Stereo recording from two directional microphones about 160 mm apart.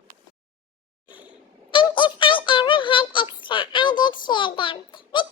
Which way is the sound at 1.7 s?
30° left (ahead or behind).